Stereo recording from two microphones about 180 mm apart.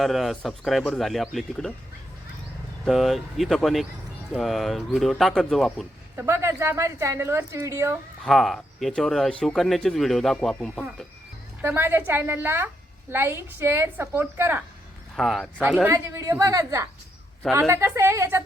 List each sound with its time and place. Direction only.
0.0 s speech: centre (ahead or behind)
2.8 s speech: centre (ahead or behind)
6.1 s a woman's voice: 15° right (ahead or behind)
8.2 s speech: centre (ahead or behind)
11.6 s a woman's voice: 10° right (ahead or behind)
15.1 s speech: centre (ahead or behind)
15.6 s a woman's voice: 10° right (ahead or behind)